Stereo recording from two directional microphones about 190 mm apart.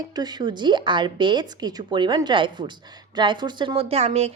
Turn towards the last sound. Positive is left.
turn(degrees=-35)  # may be behind; listen again after turning